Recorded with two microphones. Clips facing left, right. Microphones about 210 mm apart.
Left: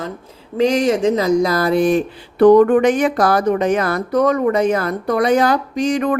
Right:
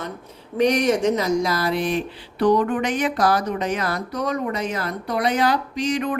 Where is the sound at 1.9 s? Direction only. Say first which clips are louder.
Left 7 dB; 50° left (ahead or behind).